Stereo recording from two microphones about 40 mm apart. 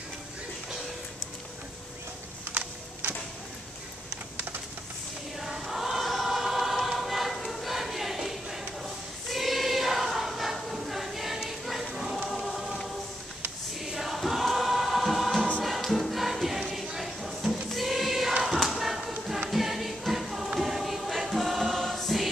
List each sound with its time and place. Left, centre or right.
2.4 s a sound: right
5.4 s choir: centre
11.4 s a sound: centre
12.3 s choir: centre
15.6 s music: centre
20.5 s choir: centre